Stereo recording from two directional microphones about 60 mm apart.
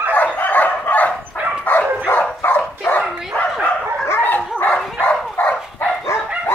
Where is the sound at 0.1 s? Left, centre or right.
Left.